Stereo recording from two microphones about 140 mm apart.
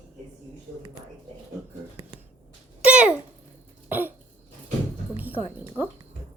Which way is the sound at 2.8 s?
5° right (ahead or behind).